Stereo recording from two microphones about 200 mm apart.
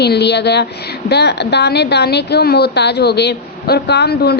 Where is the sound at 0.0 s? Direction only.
55° left (ahead or behind).